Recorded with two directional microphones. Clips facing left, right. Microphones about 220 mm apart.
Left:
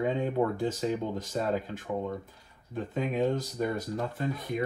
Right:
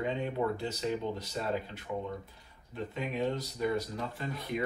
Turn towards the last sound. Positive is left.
turn(degrees=50)  # may be behind; listen again after turning